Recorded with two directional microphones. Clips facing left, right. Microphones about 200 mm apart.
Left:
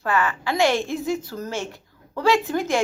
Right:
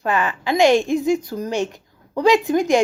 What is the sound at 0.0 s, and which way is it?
A woman's voice, 20° right (ahead or behind).